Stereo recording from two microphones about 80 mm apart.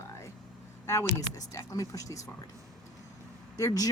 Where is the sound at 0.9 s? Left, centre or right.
Left.